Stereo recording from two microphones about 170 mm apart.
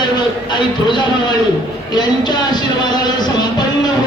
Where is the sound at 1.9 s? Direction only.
25° left (ahead or behind).